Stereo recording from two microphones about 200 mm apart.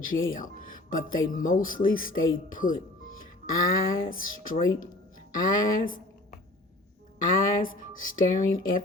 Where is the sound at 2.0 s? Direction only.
90° left.